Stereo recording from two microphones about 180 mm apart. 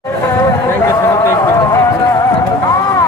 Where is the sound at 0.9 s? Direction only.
15° left (ahead or behind).